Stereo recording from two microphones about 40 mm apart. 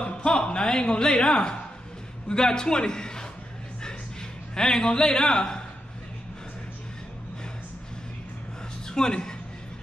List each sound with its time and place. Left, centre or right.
0.0 s a man's voice: left
4.6 s a man's voice: centre
8.8 s a man's voice: centre